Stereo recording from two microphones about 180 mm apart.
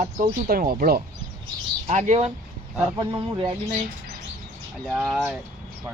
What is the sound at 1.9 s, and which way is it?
Speech, 40° right (ahead or behind).